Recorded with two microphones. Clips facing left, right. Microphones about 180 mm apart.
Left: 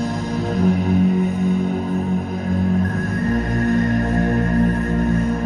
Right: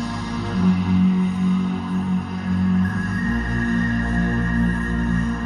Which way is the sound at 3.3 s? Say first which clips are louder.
Left 4 dB; 45° left (ahead or behind).